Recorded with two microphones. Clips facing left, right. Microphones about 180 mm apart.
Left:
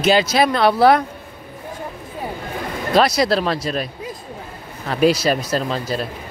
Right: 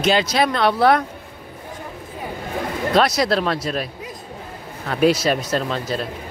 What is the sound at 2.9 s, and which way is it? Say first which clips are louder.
Speech: left 2 dB; centre (ahead or behind).